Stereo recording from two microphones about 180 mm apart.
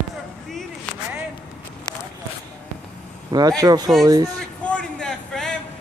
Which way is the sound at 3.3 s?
20° right (ahead or behind).